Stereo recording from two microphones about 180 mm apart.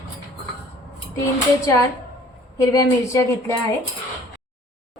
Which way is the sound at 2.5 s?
15° left (ahead or behind).